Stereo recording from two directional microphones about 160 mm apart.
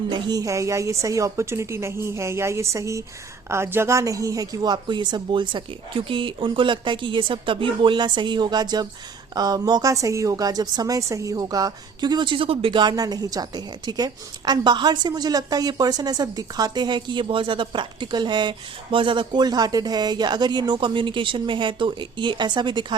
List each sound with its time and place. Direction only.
0.1 s a woman's voice: 25° right (ahead or behind)